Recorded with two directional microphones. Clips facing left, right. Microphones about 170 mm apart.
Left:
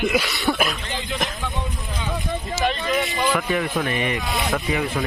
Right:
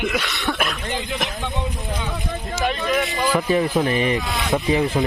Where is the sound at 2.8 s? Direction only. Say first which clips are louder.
Right 1 dB; 20° left (ahead or behind).